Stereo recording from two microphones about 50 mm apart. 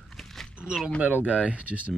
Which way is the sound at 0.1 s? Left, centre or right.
Centre.